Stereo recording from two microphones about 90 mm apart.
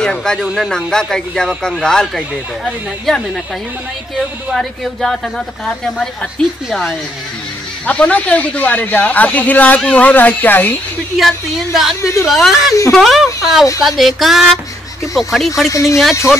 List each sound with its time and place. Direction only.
0.0 s speech: 10° left (ahead or behind)
4.6 s speech: 5° left (ahead or behind)
7.8 s speech: 15° left (ahead or behind)
11.1 s speech: centre (ahead or behind)
12.0 s speech: 35° left (ahead or behind)
12.3 s speech: centre (ahead or behind)
15.7 s speech: 35° left (ahead or behind)